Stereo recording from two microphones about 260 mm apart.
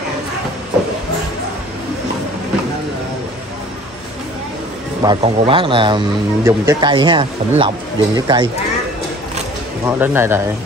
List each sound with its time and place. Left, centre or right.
5.0 s speech: centre
9.8 s speech: centre